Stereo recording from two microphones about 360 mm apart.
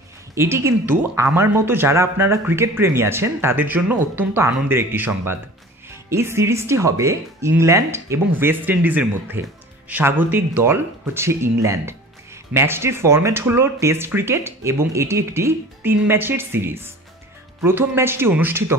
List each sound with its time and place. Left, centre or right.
0.3 s speech: centre